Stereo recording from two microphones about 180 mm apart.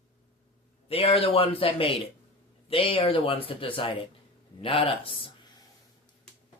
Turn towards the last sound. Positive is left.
turn(degrees=30)  # may be behind; listen again after turning